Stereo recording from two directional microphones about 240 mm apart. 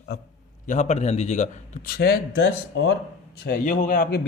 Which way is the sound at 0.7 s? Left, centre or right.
Left.